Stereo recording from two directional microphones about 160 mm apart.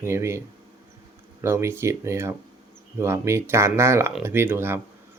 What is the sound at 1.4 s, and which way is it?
Speech, 15° right (ahead or behind).